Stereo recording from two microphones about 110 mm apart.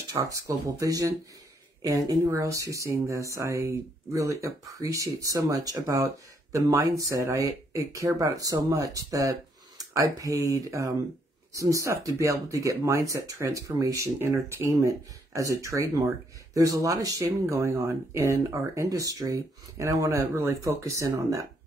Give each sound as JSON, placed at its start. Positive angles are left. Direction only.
{"t": 0.1, "sound": "speech", "side_deg": -30}